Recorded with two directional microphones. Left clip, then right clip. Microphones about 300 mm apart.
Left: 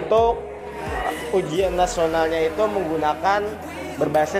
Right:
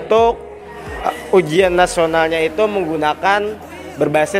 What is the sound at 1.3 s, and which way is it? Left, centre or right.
Speech, right.